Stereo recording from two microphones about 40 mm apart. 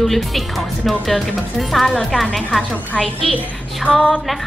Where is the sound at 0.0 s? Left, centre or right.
Centre.